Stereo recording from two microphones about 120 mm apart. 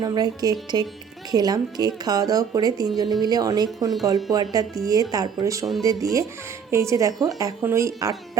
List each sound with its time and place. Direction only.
0.0 s speech: 35° right (ahead or behind)